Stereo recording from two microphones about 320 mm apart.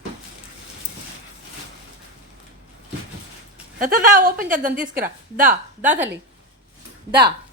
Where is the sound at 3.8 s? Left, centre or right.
Right.